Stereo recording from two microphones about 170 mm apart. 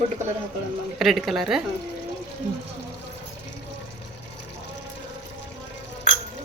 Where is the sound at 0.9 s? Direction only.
Centre (ahead or behind).